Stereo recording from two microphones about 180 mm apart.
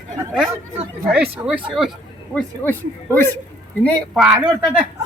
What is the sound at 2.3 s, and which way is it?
A man's voice, 10° left (ahead or behind).